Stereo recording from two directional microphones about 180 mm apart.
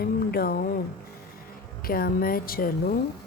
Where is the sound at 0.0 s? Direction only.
55° left (ahead or behind).